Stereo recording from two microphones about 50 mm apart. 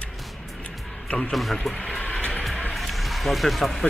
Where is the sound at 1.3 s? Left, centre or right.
Centre.